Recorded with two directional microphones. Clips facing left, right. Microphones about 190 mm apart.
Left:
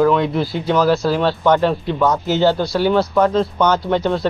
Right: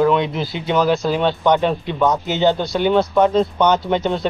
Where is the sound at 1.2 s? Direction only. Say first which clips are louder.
Even; 20° right (ahead or behind).